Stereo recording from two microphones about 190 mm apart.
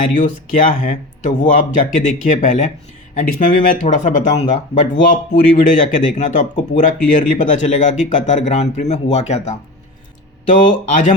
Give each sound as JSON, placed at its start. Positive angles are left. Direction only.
{"t": 0.2, "sound": "speech", "side_deg": 45}